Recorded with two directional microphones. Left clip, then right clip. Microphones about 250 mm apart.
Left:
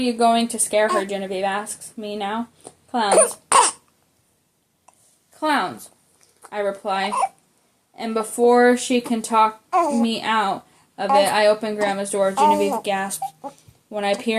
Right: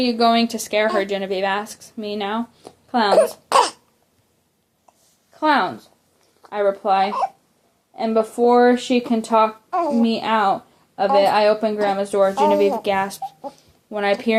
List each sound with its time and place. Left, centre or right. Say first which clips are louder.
0.0 s speech: right 1 dB; right
3.1 s speech: even; centre
5.3 s speech: right 3 dB; centre
9.6 s speech: left 2 dB; centre
10.0 s speech: right 2 dB; centre
12.5 s speech: right 3 dB; centre
12.8 s speech: right 3 dB; right